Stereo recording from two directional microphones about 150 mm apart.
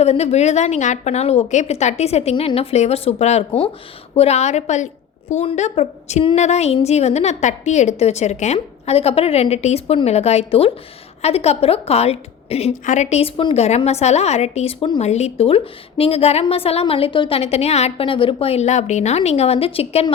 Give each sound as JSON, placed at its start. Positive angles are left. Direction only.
{"t": 0.0, "sound": "a woman's voice", "side_deg": 45}